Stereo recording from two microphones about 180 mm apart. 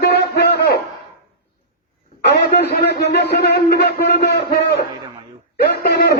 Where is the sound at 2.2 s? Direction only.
65° left (ahead or behind).